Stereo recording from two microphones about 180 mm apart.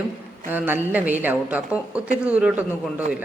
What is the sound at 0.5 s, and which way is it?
A man's voice, 10° right (ahead or behind).